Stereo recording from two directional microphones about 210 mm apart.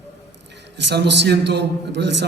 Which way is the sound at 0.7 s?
55° right (ahead or behind).